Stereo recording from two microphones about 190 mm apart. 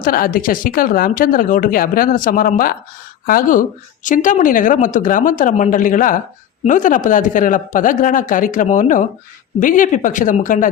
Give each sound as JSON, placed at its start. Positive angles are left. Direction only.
{"t": 0.0, "sound": "speech", "side_deg": 50}